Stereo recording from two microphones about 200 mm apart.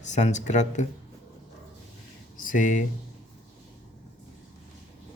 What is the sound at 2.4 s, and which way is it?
Speech, 40° left (ahead or behind).